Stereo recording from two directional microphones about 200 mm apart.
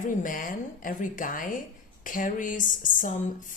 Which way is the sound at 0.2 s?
40° left (ahead or behind).